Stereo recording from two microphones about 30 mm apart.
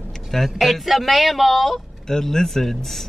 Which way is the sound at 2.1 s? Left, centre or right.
Centre.